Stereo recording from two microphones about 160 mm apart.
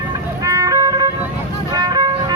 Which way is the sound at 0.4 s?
20° right (ahead or behind).